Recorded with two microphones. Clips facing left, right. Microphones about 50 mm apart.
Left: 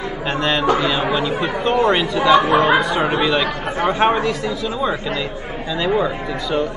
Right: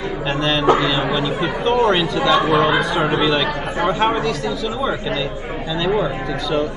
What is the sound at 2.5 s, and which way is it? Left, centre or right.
Speech, left.